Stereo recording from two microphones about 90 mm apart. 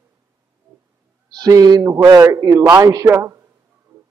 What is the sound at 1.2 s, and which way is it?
A man's voice, 45° right (ahead or behind).